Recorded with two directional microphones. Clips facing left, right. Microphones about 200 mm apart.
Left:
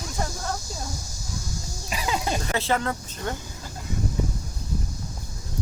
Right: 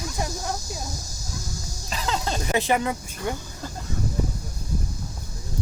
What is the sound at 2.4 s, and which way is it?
Speech, 15° right (ahead or behind).